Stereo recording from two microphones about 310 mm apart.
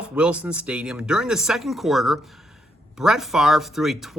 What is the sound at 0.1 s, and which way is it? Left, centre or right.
Speech, centre.